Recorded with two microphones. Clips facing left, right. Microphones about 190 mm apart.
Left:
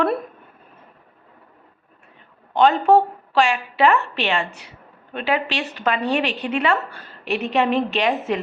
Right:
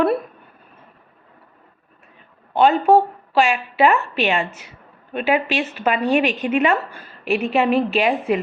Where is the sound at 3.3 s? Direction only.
15° right (ahead or behind).